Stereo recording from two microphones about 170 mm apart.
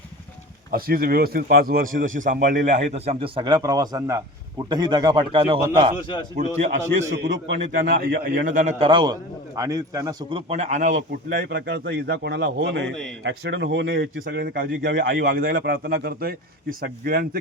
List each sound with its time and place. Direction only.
0.7 s a man's voice: 60° right (ahead or behind); by 5.9 s 30° right (ahead or behind)
6.3 s a man's voice: 45° right (ahead or behind)
7.4 s speech: 85° right; by 8.7 s 50° right (ahead or behind)
8.8 s a man's voice: 30° right (ahead or behind)
10.5 s a man's voice: 45° right (ahead or behind)
11.3 s speech: 85° right; by 17.4 s 60° right (ahead or behind)